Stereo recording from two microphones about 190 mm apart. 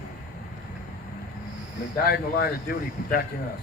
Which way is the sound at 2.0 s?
55° left (ahead or behind).